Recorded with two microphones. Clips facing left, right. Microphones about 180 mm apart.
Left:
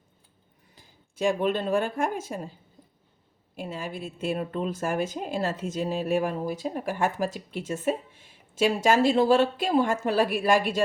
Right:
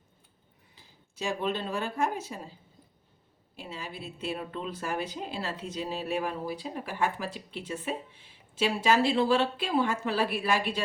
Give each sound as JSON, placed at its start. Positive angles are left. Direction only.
{"t": 0.8, "sound": "speech", "side_deg": 50}
{"t": 3.5, "sound": "speech", "side_deg": 50}